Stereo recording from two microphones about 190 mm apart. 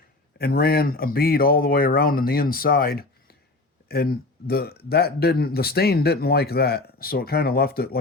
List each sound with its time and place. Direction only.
0.3 s speech: 55° left (ahead or behind)